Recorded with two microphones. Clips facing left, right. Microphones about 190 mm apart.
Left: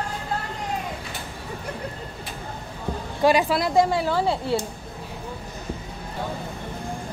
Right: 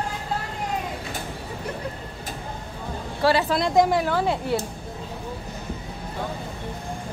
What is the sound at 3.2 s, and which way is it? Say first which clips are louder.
Speech: left 2 dB; 15° left (ahead or behind).